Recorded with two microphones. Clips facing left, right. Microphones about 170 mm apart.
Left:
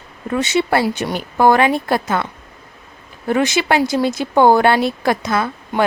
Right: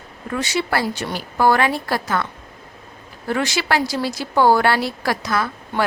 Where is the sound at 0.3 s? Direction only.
20° left (ahead or behind).